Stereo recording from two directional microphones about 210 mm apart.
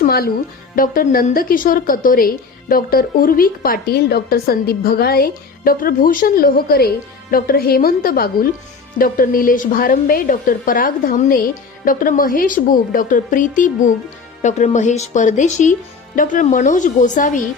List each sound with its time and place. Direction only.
0.0 s music: 45° left (ahead or behind)
0.8 s a woman's voice: 40° left (ahead or behind)